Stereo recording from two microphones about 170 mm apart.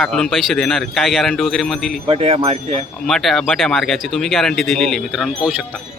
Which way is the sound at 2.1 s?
35° right (ahead or behind).